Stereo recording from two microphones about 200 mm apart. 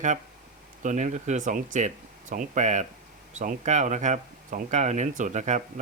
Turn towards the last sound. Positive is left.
turn(degrees=-35)  # may be behind; listen again after turning